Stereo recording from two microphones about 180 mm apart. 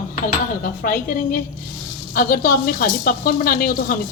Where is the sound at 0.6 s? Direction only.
50° left (ahead or behind).